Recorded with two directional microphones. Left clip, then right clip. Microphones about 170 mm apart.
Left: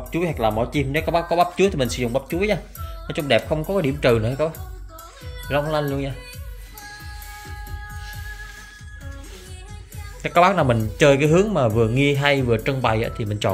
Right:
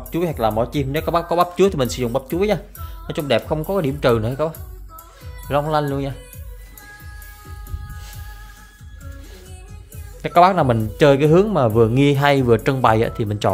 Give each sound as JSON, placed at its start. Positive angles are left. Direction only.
{"t": 0.1, "sound": "speech", "side_deg": -30}
{"t": 5.5, "sound": "speech", "side_deg": -30}
{"t": 10.2, "sound": "speech", "side_deg": -20}